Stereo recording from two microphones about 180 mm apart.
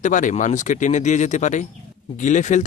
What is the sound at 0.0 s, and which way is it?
Speech, 45° left (ahead or behind).